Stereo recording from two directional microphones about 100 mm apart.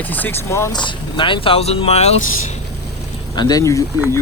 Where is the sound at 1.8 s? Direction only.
90° left.